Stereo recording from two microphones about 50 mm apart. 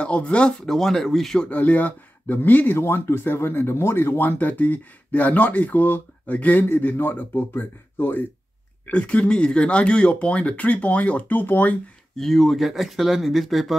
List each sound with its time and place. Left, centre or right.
0.0 s speech: left
0.7 s speech: centre
1.5 s speech: left
2.8 s speech: left
4.2 s speech: left
6.8 s speech: left
8.8 s speech: left
12.2 s speech: centre